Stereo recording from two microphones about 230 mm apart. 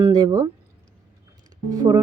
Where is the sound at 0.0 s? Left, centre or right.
Centre.